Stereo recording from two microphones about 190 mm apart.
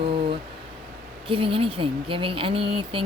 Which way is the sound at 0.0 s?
30° right (ahead or behind).